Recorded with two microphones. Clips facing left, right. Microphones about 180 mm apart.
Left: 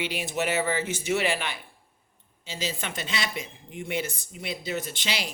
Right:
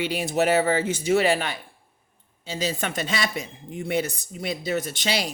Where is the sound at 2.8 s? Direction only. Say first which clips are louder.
Right 5 dB; 45° right (ahead or behind).